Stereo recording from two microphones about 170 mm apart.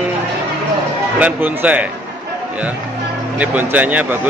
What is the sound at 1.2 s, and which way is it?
Speech, 10° right (ahead or behind).